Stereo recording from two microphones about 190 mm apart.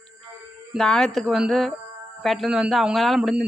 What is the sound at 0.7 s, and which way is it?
Speech, centre (ahead or behind).